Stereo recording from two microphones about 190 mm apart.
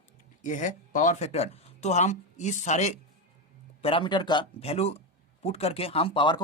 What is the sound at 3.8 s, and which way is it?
Speech, 30° left (ahead or behind).